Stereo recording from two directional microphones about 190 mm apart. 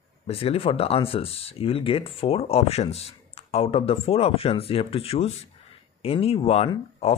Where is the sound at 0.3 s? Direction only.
30° left (ahead or behind).